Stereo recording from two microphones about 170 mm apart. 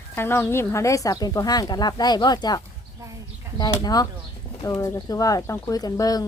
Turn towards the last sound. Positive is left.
turn(degrees=25)  # may be behind; listen again after turning